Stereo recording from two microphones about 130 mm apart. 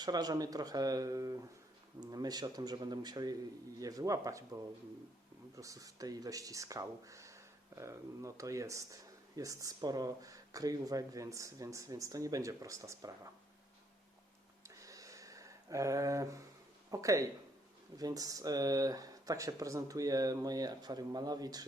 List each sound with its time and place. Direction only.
0.0 s speech: 30° right (ahead or behind)
14.6 s a sound: 25° right (ahead or behind)
16.9 s speech: 25° right (ahead or behind)